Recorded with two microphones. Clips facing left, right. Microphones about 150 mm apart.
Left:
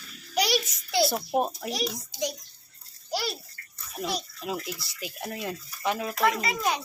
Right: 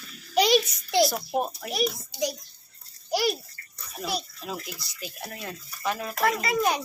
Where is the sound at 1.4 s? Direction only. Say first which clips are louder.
Left 1 dB; 30° left (ahead or behind).